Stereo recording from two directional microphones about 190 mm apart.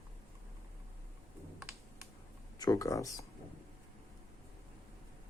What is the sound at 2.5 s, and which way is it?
Speech, 20° left (ahead or behind).